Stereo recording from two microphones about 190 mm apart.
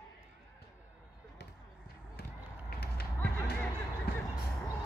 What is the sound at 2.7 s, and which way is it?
Run, 55° left (ahead or behind).